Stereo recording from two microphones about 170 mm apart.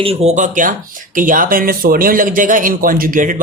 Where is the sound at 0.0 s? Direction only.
35° right (ahead or behind).